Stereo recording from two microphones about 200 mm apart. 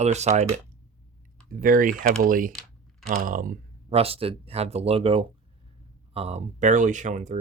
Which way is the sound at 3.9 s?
30° right (ahead or behind).